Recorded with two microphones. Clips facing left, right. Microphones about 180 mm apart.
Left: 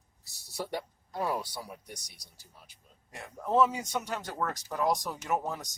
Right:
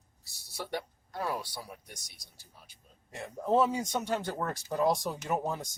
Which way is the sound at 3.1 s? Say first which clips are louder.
Right 2 dB; 25° right (ahead or behind).